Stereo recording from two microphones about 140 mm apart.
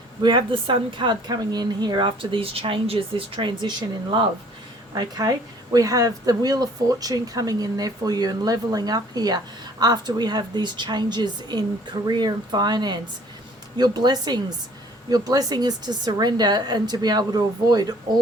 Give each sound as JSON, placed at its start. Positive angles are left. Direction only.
{"t": 0.2, "sound": "a woman's voice", "side_deg": -35}